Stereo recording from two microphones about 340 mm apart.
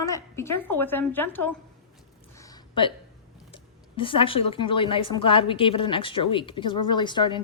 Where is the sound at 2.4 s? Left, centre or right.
Centre.